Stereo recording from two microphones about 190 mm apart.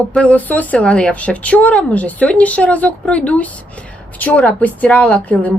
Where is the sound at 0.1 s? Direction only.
5° left (ahead or behind).